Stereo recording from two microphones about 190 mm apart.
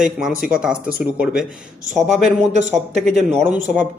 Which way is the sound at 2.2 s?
35° right (ahead or behind).